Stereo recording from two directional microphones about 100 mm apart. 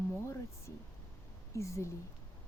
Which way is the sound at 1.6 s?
30° left (ahead or behind).